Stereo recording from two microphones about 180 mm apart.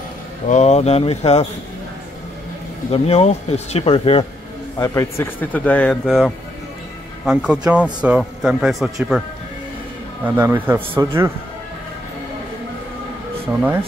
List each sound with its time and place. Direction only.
0.5 s speech: 40° left (ahead or behind)
2.9 s speech: 35° left (ahead or behind)
4.7 s a man's voice: 15° left (ahead or behind); by 8.9 s centre (ahead or behind)
10.2 s speech: 10° right (ahead or behind)
13.5 s speech: 5° right (ahead or behind)